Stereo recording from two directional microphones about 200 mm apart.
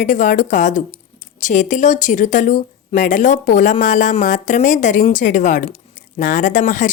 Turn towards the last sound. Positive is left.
turn(degrees=40)  # may be behind; listen again after turning